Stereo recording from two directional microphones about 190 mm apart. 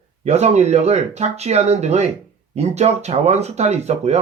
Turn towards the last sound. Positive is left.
turn(degrees=-35)  # may be behind; listen again after turning